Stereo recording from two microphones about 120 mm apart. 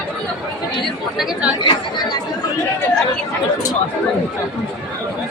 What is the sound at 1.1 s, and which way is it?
Speech, 5° right (ahead or behind).